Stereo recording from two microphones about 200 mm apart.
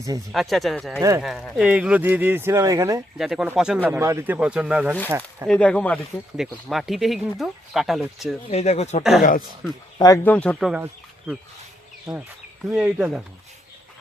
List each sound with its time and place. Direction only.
0.3 s speech: centre (ahead or behind); by 3.0 s 15° right (ahead or behind)
3.2 s speech: centre (ahead or behind)
5.5 s speech: 5° left (ahead or behind)
8.4 s speech: 30° left (ahead or behind)
10.0 s speech: 15° left (ahead or behind)
10.3 s speech: 5° left (ahead or behind)
12.7 s speech: 5° right (ahead or behind)